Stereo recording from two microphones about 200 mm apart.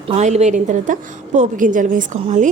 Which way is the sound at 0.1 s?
35° right (ahead or behind).